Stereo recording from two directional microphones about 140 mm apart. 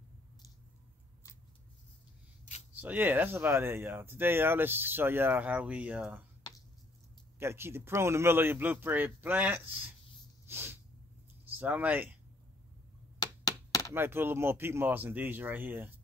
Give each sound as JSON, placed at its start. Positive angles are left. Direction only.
{"t": 2.8, "sound": "speech", "side_deg": -10}
{"t": 7.3, "sound": "speech", "side_deg": -15}
{"t": 10.4, "sound": "sneeze", "side_deg": -15}
{"t": 11.5, "sound": "speech", "side_deg": -10}
{"t": 13.2, "sound": "a sound", "side_deg": 25}
{"t": 13.9, "sound": "speech", "side_deg": -15}